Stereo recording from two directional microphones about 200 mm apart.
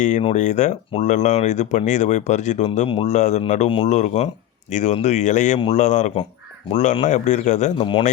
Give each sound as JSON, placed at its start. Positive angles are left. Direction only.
{"t": 0.0, "sound": "speech", "side_deg": 35}